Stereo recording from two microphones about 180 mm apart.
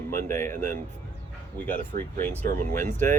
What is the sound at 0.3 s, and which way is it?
Speech, 10° left (ahead or behind).